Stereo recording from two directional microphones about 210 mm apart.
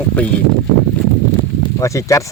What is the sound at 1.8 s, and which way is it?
Speech, 15° left (ahead or behind).